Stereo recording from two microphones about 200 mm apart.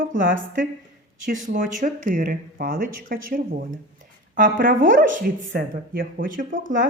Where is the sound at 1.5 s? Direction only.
40° right (ahead or behind).